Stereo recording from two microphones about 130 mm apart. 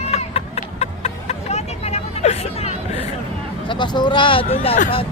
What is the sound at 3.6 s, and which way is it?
Speech, 35° left (ahead or behind).